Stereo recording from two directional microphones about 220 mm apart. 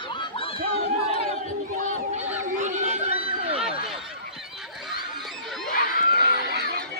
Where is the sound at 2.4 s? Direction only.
35° right (ahead or behind).